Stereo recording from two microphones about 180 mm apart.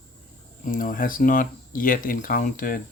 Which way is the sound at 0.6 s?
50° left (ahead or behind).